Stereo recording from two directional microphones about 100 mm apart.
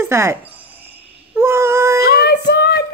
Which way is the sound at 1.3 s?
25° right (ahead or behind).